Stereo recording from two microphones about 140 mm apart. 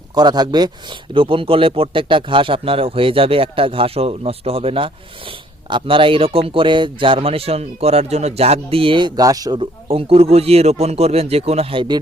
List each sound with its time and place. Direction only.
0.1 s a man's voice: 30° right (ahead or behind)
9.6 s speech: 45° right (ahead or behind)